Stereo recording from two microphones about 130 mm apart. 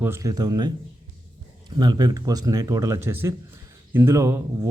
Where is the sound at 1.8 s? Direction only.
30° right (ahead or behind).